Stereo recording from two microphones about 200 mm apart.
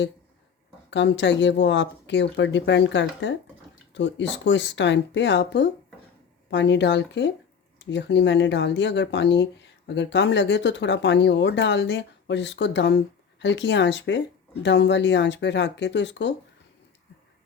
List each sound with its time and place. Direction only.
0.9 s speech: 65° left (ahead or behind)